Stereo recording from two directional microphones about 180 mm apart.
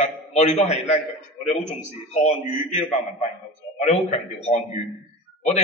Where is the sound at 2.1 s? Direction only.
40° left (ahead or behind).